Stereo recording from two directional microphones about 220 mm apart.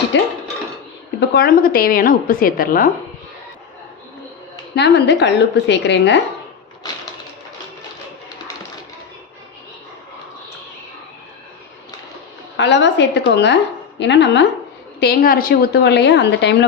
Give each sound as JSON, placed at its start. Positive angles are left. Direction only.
{"t": 0.1, "sound": "a woman's voice", "side_deg": 50}
{"t": 1.3, "sound": "a woman's voice", "side_deg": 40}
{"t": 4.7, "sound": "a woman's voice", "side_deg": 50}
{"t": 12.5, "sound": "a woman's voice", "side_deg": 55}
{"t": 15.0, "sound": "a woman's voice", "side_deg": 45}